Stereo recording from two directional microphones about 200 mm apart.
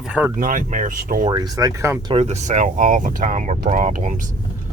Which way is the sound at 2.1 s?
35° right (ahead or behind).